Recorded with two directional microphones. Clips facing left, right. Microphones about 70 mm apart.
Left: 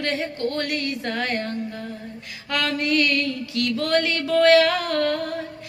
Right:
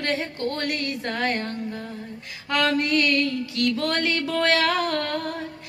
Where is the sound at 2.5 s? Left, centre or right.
Right.